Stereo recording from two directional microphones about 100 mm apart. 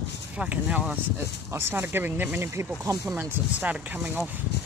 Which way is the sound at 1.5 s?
25° right (ahead or behind).